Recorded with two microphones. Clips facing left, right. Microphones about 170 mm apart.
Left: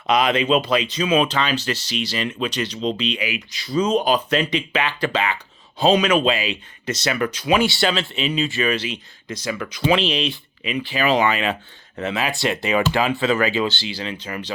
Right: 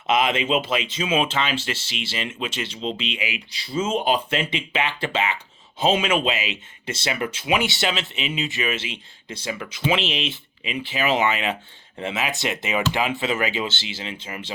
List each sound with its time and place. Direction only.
0.1 s speech: 25° right (ahead or behind)